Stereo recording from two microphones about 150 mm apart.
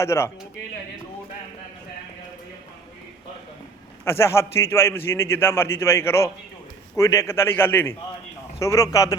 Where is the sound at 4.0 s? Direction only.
15° left (ahead or behind).